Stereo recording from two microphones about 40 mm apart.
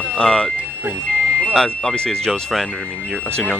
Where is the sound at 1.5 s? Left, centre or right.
Centre.